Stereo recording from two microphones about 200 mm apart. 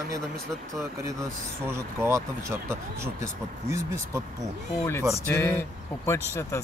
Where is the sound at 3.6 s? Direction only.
15° right (ahead or behind).